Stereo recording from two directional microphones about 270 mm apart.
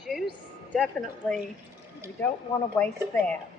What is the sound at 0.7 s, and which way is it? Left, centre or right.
Speech, centre.